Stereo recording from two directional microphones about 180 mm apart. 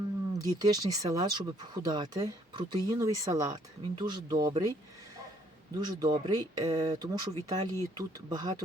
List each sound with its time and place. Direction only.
0.3 s speech: 20° right (ahead or behind)
5.7 s speech: 20° right (ahead or behind)